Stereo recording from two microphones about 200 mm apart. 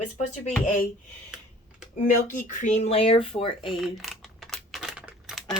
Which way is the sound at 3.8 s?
Centre (ahead or behind).